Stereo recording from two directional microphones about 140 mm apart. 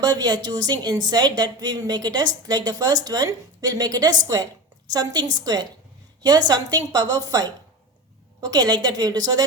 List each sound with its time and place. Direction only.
0.0 s a woman's voice: 30° right (ahead or behind)